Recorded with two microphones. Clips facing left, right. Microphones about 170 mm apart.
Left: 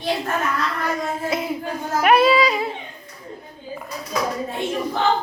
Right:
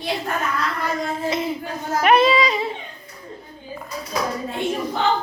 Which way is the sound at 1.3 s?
5° left (ahead or behind).